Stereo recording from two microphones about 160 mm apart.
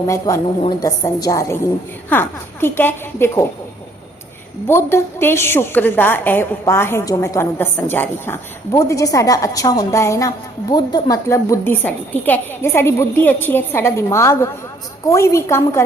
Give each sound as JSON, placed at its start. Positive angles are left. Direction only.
{"t": 0.1, "sound": "a woman's voice", "side_deg": 20}
{"t": 4.7, "sound": "a woman's voice", "side_deg": 15}